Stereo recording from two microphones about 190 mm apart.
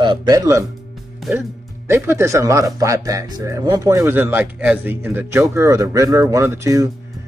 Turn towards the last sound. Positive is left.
turn(degrees=-15)  # may be behind; listen again after turning